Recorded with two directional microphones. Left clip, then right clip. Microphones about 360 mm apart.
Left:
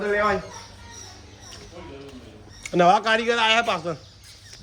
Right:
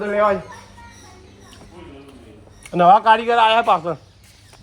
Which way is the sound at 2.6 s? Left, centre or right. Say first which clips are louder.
Right 6 dB; centre.